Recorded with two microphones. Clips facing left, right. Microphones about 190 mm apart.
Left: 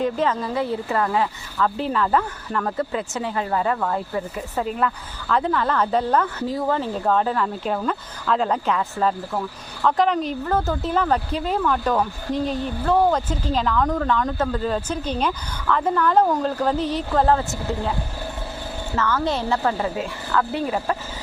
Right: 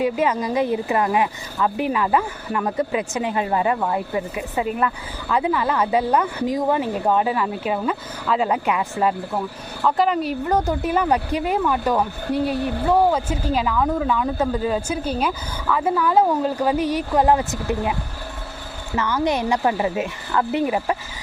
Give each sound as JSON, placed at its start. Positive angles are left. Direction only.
{"t": 0.0, "sound": "speech", "side_deg": -10}
{"t": 18.9, "sound": "speech", "side_deg": -15}